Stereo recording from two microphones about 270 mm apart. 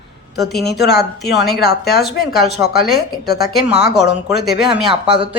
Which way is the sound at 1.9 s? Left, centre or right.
Left.